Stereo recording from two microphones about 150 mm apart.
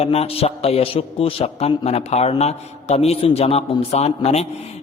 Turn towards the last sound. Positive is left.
turn(degrees=45)  # may be behind; listen again after turning